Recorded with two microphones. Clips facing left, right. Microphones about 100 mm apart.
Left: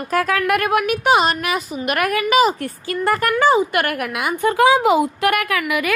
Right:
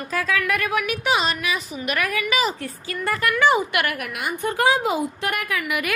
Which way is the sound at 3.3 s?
35° left (ahead or behind).